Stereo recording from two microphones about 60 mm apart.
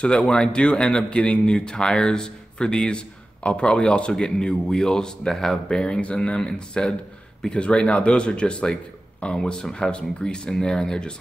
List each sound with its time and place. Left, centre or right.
0.0 s a man's voice: centre